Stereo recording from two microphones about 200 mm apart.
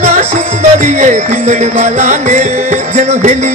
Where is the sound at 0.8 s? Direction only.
35° right (ahead or behind).